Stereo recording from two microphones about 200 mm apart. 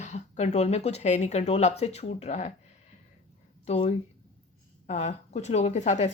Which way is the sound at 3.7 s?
30° left (ahead or behind).